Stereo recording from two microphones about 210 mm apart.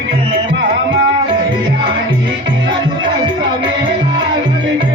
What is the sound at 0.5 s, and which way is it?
Music, 60° right (ahead or behind).